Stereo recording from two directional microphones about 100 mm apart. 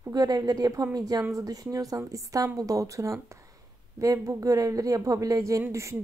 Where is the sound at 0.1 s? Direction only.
40° right (ahead or behind).